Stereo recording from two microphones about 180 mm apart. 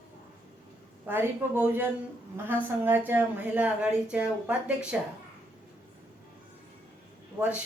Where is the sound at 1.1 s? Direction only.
10° right (ahead or behind).